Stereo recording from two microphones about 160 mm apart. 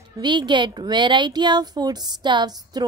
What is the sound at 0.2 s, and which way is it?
A woman's voice, 30° right (ahead or behind).